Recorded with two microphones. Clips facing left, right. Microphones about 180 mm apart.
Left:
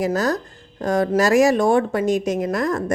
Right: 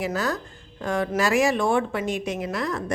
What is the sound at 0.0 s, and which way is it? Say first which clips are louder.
Speech: left 6 dB; 40° left (ahead or behind).